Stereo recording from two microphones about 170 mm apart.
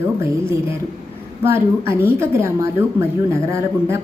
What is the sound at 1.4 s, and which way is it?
Speech, 15° right (ahead or behind).